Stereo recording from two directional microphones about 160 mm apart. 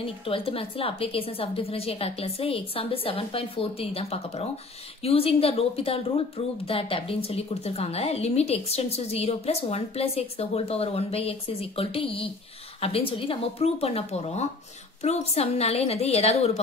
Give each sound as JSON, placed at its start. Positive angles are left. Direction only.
{"t": 0.0, "sound": "speech", "side_deg": 35}